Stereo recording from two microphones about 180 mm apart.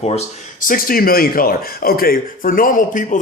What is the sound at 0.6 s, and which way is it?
A man's voice, 50° left (ahead or behind).